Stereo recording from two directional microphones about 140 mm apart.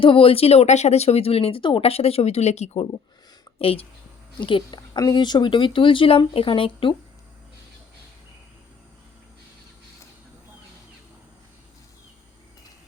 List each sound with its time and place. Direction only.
0.0 s speech: 40° left (ahead or behind)